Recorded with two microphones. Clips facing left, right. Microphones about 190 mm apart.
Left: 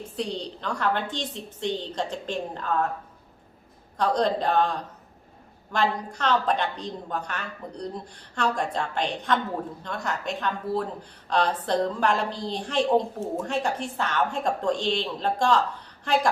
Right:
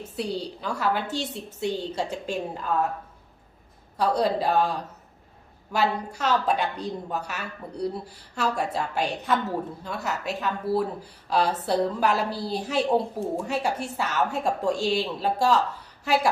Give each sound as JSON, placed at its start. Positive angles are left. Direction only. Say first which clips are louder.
{"t": 0.0, "sound": "speech", "louder": "right 1 dB", "side_deg": -5}
{"t": 3.9, "sound": "speech", "louder": "even", "side_deg": -5}